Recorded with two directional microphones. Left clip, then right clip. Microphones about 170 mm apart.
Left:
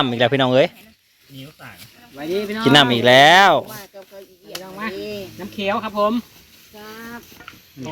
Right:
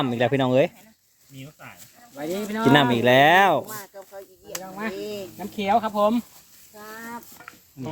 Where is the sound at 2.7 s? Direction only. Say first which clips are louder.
Left 5 dB; 5° right (ahead or behind).